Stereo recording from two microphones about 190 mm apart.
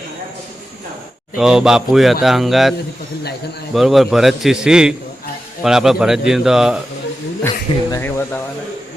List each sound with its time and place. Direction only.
1.4 s a man's voice: 5° right (ahead or behind)
3.8 s a man's voice: centre (ahead or behind)
7.4 s speech: 15° left (ahead or behind)